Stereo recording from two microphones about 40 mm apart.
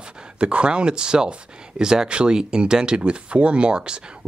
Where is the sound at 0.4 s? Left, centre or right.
Right.